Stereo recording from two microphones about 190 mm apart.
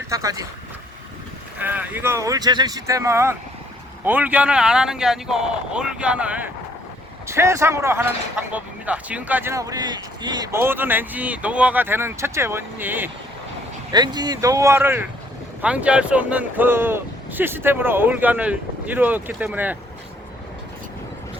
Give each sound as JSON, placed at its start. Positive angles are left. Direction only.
{"t": 0.1, "sound": "speech", "side_deg": -15}
{"t": 1.5, "sound": "speech", "side_deg": -10}
{"t": 13.9, "sound": "speech", "side_deg": -20}